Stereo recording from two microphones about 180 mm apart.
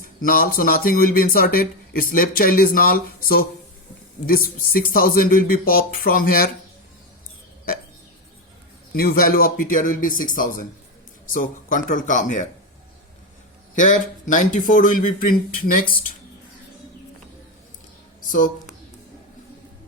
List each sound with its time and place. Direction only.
0.0 s speech: 50° left (ahead or behind)
8.9 s speech: 55° left (ahead or behind)
13.7 s speech: 45° left (ahead or behind)
18.2 s speech: 45° left (ahead or behind)